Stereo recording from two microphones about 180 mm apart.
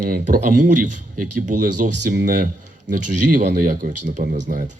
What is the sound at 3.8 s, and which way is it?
Speech, 45° right (ahead or behind).